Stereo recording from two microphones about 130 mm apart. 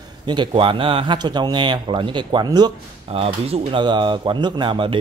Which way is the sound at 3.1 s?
50° right (ahead or behind).